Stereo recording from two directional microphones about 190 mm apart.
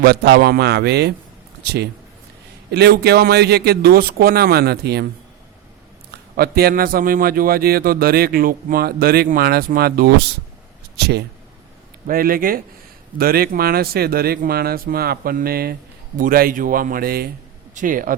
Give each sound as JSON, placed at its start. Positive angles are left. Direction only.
{"t": 0.0, "sound": "speech", "side_deg": -55}
{"t": 6.3, "sound": "a man's voice", "side_deg": -55}